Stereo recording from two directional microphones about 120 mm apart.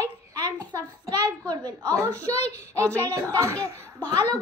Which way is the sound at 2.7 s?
20° right (ahead or behind).